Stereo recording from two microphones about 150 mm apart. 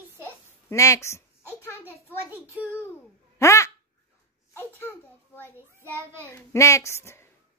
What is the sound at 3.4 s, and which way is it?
A child's voice, 20° left (ahead or behind).